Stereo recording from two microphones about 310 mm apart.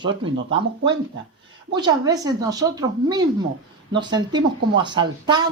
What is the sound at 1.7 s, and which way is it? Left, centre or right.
Speech, centre.